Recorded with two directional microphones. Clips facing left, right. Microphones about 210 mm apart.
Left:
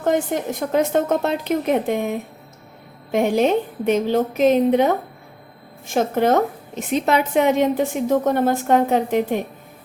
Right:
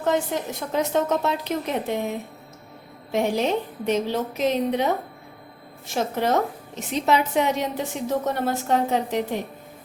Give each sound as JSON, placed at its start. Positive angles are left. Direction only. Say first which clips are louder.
{"t": 0.7, "sound": "a woman's voice", "louder": "left 4 dB", "side_deg": 55}
{"t": 5.9, "sound": "a woman's voice", "louder": "left 5 dB", "side_deg": 50}